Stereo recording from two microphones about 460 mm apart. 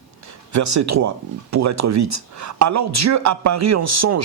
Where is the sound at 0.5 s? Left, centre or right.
Right.